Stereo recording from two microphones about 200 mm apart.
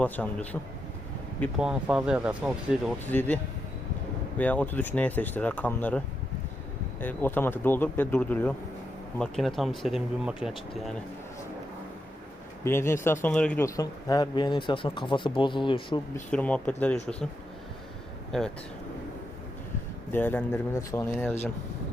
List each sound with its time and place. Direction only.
0.0 s speech: 5° left (ahead or behind)
3.1 s speech: 10° left (ahead or behind)
7.0 s speech: 10° left (ahead or behind)
12.9 s speech: 10° left (ahead or behind)
16.3 s speech: 5° left (ahead or behind)
18.3 s speech: centre (ahead or behind)
20.1 s speech: 10° left (ahead or behind)